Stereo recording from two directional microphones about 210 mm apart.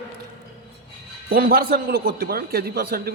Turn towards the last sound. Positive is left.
turn(degrees=-50)  # may be behind; listen again after turning